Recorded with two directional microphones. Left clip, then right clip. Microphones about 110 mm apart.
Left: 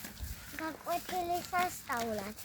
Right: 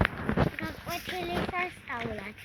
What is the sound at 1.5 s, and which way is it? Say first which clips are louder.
Speech: even; 70° left (ahead or behind).